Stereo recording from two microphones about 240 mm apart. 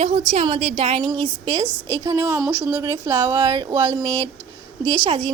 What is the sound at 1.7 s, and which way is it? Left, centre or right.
Speech, centre.